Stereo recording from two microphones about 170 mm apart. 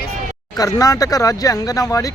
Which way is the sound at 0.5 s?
20° left (ahead or behind).